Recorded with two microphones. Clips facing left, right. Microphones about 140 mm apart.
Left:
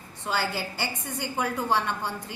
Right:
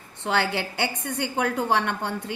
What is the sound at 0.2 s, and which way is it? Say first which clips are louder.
A woman's voice: right 4 dB; 70° right (ahead or behind).